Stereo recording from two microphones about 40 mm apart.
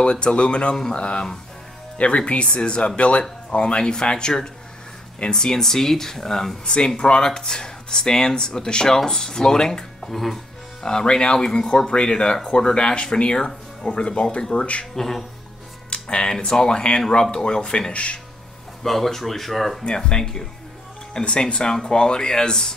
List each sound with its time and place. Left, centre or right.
0.0 s speech: left
10.0 s speech: centre
10.8 s speech: centre
15.0 s speech: centre
16.1 s speech: left
17.9 s speech: left
18.8 s speech: centre
20.0 s speech: centre